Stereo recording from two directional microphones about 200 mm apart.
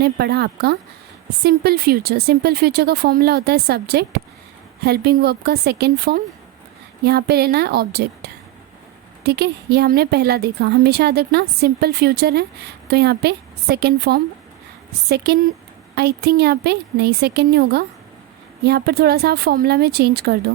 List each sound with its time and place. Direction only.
0.0 s a woman's voice: 55° right (ahead or behind)